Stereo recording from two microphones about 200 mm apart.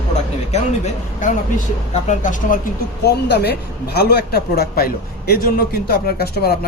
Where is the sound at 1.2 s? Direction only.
40° left (ahead or behind).